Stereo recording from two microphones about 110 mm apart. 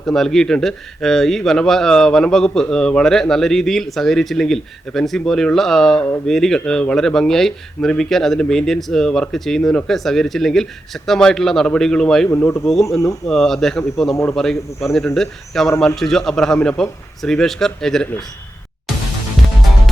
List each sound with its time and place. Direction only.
0.0 s speech: 5° left (ahead or behind)
12.3 s speech: 20° left (ahead or behind)
12.6 s speech: centre (ahead or behind)